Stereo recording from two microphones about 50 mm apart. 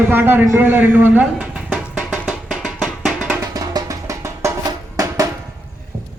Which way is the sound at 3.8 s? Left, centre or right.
Right.